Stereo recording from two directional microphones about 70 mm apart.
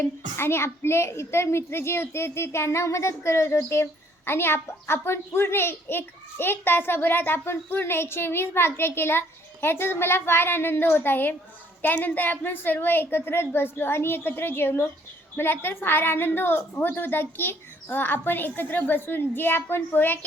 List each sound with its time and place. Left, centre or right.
0.0 s a child's voice: left